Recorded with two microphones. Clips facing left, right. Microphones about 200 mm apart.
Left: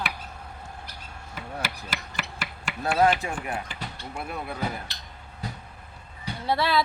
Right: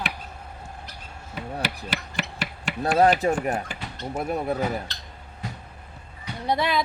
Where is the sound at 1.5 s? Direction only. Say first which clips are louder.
Right 4 dB; 35° right (ahead or behind).